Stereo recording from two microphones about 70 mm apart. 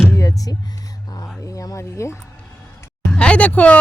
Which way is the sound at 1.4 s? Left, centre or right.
Left.